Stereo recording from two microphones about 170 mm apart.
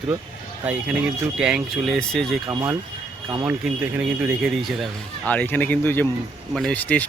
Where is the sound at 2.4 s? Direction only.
25° right (ahead or behind).